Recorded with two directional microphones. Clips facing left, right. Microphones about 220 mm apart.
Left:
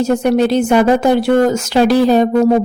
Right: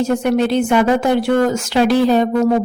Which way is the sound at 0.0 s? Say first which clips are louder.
Left 3 dB; 40° left (ahead or behind).